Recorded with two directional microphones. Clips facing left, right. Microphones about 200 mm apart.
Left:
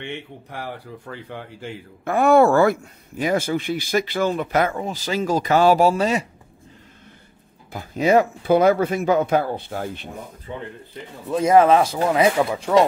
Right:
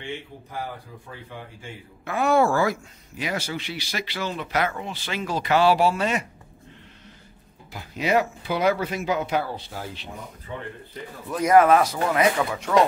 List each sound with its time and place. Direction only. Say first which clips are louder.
0.0 s speech: left 2 dB; 65° left (ahead or behind)
2.0 s speech: left 6 dB; 50° left (ahead or behind); by 6.2 s 35° left (ahead or behind)
7.7 s speech: left 6 dB; 45° left (ahead or behind)
11.2 s speech: left 2 dB; 25° left (ahead or behind)